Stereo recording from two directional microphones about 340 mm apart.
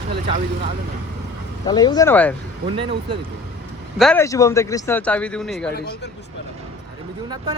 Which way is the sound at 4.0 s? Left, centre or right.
Centre.